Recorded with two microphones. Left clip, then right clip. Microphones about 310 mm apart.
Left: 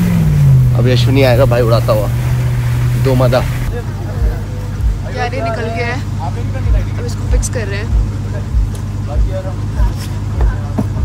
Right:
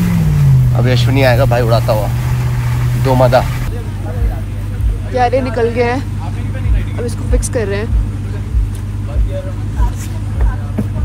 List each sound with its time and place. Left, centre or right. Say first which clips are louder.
0.0 s vehicle: left 1 dB; centre
0.9 s speech: left 1 dB; centre
5.1 s speech: right 5 dB; centre
7.3 s speech: right 5 dB; centre